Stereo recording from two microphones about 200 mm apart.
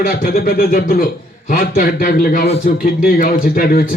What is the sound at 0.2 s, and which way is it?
A man's voice, 45° left (ahead or behind).